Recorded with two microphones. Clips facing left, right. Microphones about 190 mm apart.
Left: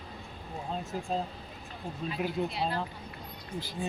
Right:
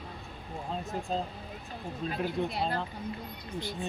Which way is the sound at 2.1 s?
50° right (ahead or behind).